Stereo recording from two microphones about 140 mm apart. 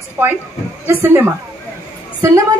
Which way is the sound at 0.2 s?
15° right (ahead or behind).